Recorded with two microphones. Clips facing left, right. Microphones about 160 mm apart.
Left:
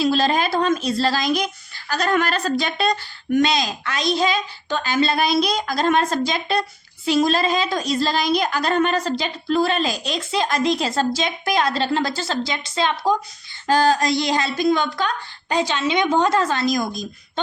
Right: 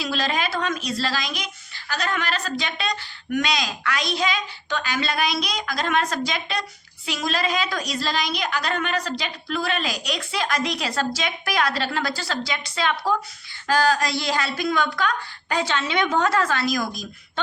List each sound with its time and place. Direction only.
0.0 s a woman's voice: 30° left (ahead or behind)